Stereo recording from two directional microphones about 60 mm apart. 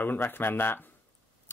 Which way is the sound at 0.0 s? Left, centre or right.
Left.